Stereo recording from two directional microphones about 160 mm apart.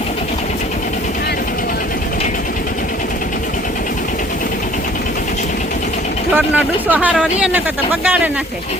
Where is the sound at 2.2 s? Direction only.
50° left (ahead or behind).